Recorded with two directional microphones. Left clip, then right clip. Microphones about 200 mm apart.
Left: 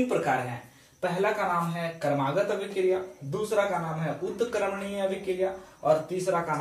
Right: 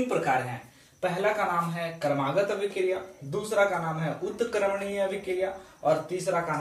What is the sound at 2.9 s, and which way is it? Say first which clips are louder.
Speech: left 3 dB; 10° left (ahead or behind).